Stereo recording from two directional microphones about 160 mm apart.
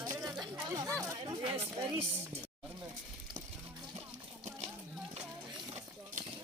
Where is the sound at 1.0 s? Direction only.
25° right (ahead or behind).